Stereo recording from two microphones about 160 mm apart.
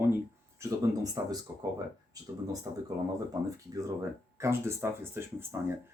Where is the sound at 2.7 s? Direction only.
20° right (ahead or behind).